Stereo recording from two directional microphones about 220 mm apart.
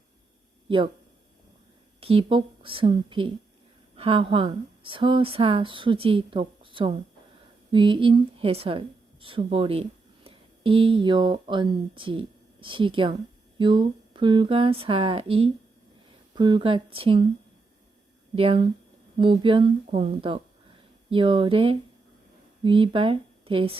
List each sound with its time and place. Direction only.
2.0 s speech: 25° right (ahead or behind)
18.3 s speech: 25° right (ahead or behind)